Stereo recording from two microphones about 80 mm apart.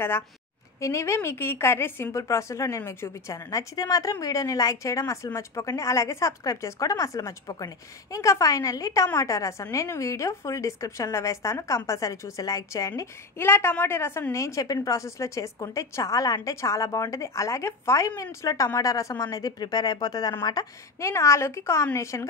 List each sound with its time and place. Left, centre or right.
0.7 s a woman's voice: left
2.1 s a woman's voice: left
13.4 s a woman's voice: left
19.3 s speech: left
21.0 s a woman's voice: left